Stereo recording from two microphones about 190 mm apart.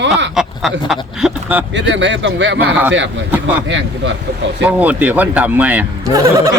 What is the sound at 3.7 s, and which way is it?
Speech, 70° right (ahead or behind).